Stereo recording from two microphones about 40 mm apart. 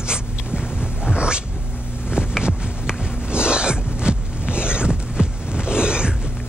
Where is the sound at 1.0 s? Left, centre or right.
Right.